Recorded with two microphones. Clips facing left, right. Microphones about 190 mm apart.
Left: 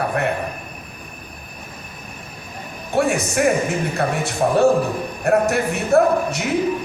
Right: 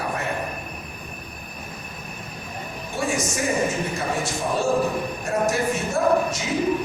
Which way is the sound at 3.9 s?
65° left (ahead or behind).